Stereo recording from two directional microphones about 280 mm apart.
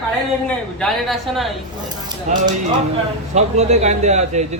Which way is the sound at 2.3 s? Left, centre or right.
Right.